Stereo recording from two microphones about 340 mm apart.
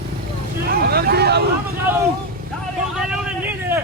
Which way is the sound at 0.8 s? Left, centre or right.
Right.